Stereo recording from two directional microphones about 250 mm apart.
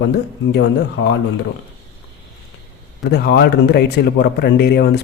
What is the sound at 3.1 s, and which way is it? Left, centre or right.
Speech, left.